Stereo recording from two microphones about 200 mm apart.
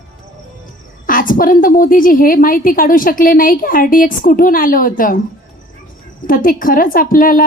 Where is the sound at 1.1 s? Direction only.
45° left (ahead or behind).